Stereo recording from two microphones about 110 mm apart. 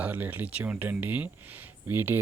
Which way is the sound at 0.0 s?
15° right (ahead or behind).